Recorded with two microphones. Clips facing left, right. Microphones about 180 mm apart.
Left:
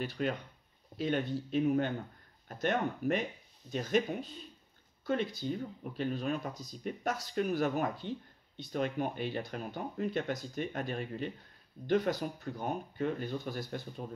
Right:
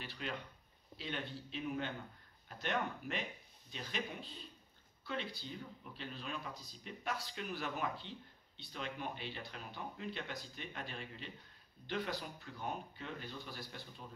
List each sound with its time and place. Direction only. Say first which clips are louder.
0.0 s speech: left 10 dB; 45° left (ahead or behind)